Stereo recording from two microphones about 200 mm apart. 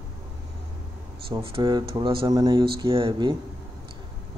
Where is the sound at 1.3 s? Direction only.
25° right (ahead or behind).